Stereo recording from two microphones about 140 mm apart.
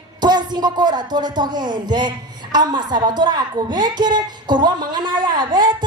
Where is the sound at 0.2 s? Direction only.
30° right (ahead or behind).